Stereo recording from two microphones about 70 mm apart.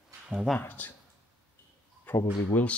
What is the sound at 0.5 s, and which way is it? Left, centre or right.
Speech, left.